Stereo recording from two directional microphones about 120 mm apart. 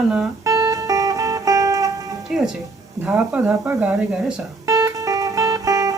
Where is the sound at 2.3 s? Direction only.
5° right (ahead or behind).